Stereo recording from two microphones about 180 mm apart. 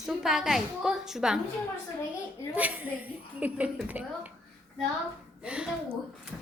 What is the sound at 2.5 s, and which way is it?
A woman's voice, 10° right (ahead or behind).